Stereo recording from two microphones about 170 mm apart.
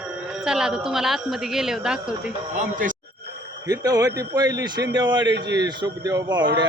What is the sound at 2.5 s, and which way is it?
Speech, 50° right (ahead or behind).